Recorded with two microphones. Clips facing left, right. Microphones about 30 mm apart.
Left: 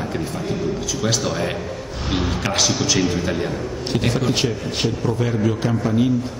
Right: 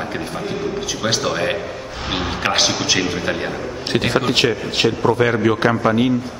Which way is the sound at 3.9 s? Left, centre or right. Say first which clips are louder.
Right 3 dB; right.